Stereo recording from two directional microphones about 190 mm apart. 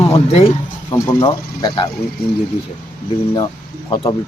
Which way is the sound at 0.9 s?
15° left (ahead or behind).